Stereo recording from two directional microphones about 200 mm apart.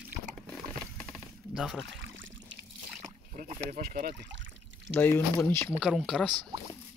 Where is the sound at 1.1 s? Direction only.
Centre (ahead or behind).